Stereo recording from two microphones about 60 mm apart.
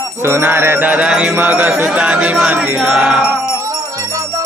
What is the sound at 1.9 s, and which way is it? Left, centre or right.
Speech, centre.